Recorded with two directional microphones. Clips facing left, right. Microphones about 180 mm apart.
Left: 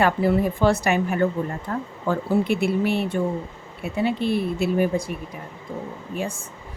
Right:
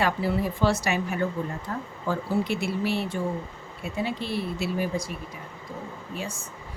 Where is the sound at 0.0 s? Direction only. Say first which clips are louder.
Left 6 dB; 55° left (ahead or behind).